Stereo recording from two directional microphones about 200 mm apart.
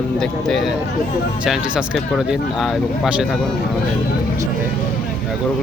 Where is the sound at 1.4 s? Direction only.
5° right (ahead or behind).